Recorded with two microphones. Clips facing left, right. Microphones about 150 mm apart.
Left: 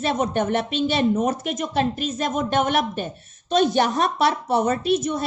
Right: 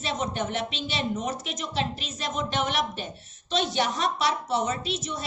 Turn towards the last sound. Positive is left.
turn(degrees=55)  # may be behind; listen again after turning